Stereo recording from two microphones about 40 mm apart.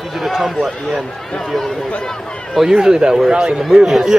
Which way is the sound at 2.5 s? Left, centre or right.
Centre.